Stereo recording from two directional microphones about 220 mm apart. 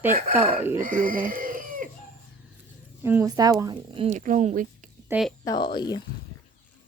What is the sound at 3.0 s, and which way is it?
Speech, 10° right (ahead or behind).